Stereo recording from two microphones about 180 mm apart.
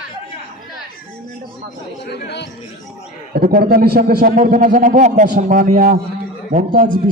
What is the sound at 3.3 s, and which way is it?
A man's voice, 55° right (ahead or behind).